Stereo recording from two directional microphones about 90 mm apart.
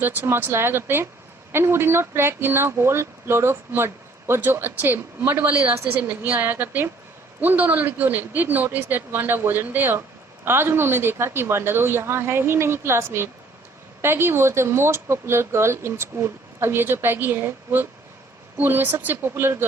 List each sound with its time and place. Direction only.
0.0 s speech: 20° right (ahead or behind)